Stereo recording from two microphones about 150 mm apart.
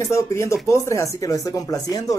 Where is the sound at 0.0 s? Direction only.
20° left (ahead or behind).